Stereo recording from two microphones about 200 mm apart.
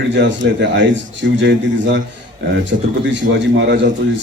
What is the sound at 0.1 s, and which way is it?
A man's voice, 60° right (ahead or behind).